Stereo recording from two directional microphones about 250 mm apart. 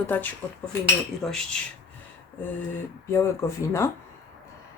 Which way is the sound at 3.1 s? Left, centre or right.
Centre.